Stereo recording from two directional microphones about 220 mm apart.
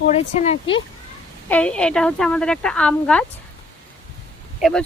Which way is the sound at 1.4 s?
5° left (ahead or behind).